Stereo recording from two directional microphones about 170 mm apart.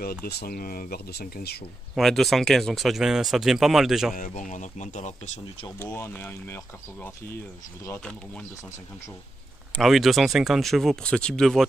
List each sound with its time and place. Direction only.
0.0 s speech: 65° left (ahead or behind)
2.0 s speech: centre (ahead or behind)
4.1 s speech: 50° left (ahead or behind)
5.8 s speech: 15° left (ahead or behind)
9.8 s speech: centre (ahead or behind)